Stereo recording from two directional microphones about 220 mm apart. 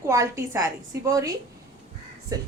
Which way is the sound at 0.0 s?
15° right (ahead or behind).